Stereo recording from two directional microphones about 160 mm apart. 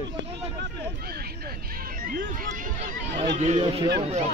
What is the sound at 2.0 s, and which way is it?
Speech, 60° right (ahead or behind).